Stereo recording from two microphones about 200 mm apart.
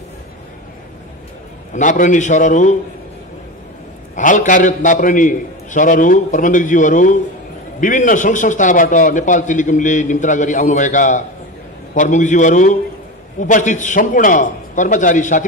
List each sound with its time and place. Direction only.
1.7 s a man's voice: 40° left (ahead or behind)
4.1 s a man's voice: 40° left (ahead or behind)